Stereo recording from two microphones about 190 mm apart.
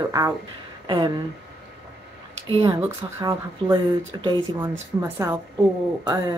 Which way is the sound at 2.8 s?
15° right (ahead or behind).